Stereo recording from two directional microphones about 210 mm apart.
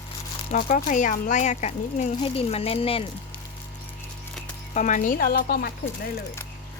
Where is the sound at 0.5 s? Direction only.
40° left (ahead or behind).